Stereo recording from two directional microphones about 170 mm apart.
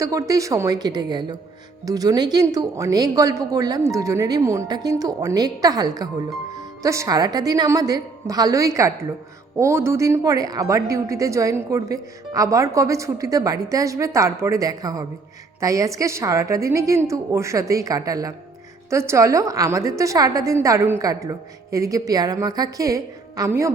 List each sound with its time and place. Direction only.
0.0 s a woman's voice: 20° right (ahead or behind)